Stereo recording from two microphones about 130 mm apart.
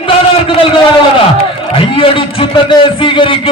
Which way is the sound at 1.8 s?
40° left (ahead or behind).